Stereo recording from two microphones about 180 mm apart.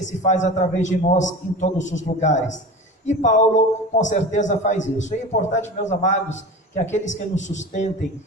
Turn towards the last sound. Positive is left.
turn(degrees=40)  # may be behind; listen again after turning